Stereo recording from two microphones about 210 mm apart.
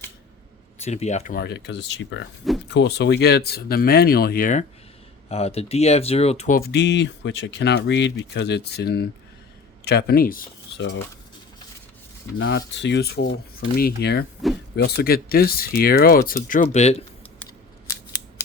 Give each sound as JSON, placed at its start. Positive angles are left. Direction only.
{"t": 0.8, "sound": "speech", "side_deg": 30}
{"t": 1.4, "sound": "speech", "side_deg": 55}
{"t": 5.3, "sound": "speech", "side_deg": 30}
{"t": 6.6, "sound": "speech", "side_deg": 55}
{"t": 10.8, "sound": "speech", "side_deg": 60}
{"t": 12.4, "sound": "speech", "side_deg": 60}
{"t": 16.7, "sound": "speech", "side_deg": 30}